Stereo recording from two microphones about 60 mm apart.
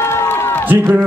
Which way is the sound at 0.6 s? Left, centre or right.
Right.